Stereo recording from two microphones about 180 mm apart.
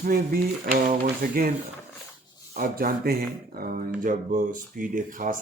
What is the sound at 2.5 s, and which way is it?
Speech, 55° right (ahead or behind).